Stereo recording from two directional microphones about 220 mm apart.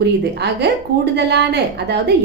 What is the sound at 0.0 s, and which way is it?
A woman's voice, 50° right (ahead or behind).